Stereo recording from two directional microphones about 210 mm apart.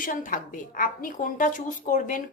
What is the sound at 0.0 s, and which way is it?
A woman's voice, 40° left (ahead or behind).